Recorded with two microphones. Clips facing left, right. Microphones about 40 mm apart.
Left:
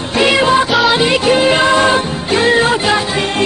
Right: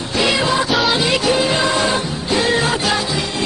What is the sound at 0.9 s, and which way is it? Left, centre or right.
Music, left.